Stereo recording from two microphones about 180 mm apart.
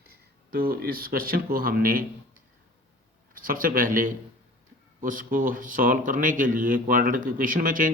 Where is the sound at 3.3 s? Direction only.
50° right (ahead or behind).